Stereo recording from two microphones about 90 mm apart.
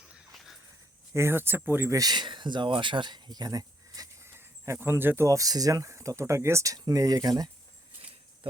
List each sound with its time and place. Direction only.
1.1 s speech: 30° right (ahead or behind)
2.0 s speech: 50° right (ahead or behind)
4.3 s speech: 30° right (ahead or behind)